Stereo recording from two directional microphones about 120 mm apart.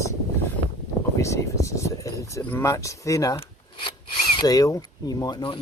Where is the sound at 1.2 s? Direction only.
25° left (ahead or behind).